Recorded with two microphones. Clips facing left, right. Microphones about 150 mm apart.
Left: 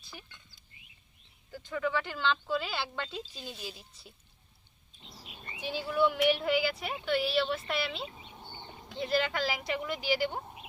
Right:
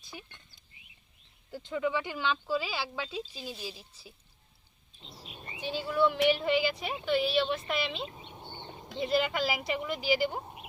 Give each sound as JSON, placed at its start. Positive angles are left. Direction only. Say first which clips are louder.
{"t": 1.5, "sound": "speech", "louder": "right 2 dB", "side_deg": -25}
{"t": 5.0, "sound": "a sound", "louder": "right 2 dB", "side_deg": -25}
{"t": 5.9, "sound": "speech", "louder": "right 1 dB", "side_deg": 10}